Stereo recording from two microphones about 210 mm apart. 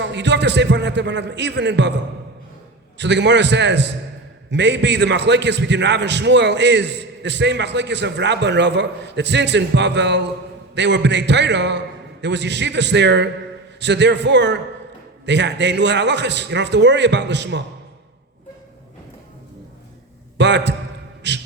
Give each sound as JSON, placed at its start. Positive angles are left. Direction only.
{"t": 0.0, "sound": "a man's voice", "side_deg": -55}
{"t": 3.0, "sound": "a man's voice", "side_deg": -55}
{"t": 20.4, "sound": "a man's voice", "side_deg": -55}